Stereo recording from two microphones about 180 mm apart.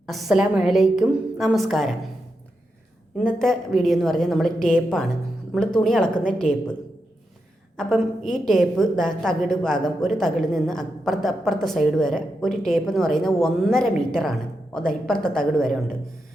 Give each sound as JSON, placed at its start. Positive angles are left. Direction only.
{"t": 0.1, "sound": "a woman's voice", "side_deg": 0}
{"t": 3.2, "sound": "a woman's voice", "side_deg": 5}
{"t": 6.5, "sound": "a woman's voice", "side_deg": 45}
{"t": 7.8, "sound": "a woman's voice", "side_deg": 0}